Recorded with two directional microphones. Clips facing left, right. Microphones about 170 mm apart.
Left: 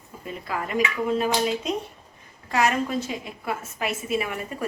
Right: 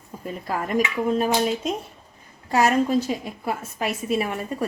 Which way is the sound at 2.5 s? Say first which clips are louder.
Right 4 dB; 40° right (ahead or behind).